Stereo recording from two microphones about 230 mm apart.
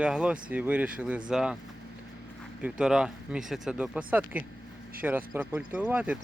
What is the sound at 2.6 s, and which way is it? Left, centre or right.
Speech, centre.